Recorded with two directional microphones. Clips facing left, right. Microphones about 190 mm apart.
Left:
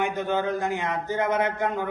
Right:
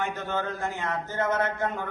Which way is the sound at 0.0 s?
15° left (ahead or behind).